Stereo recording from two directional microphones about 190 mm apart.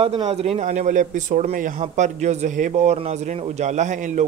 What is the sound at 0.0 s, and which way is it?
Speech, 30° right (ahead or behind).